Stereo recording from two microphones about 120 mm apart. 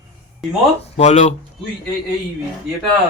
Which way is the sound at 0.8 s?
70° left (ahead or behind).